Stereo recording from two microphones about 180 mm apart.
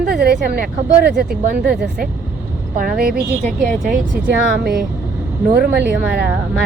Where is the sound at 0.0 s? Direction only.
60° right (ahead or behind).